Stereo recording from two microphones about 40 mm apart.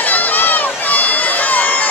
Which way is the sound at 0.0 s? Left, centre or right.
Left.